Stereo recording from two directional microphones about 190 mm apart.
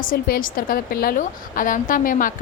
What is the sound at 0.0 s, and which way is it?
A woman's voice, 45° left (ahead or behind).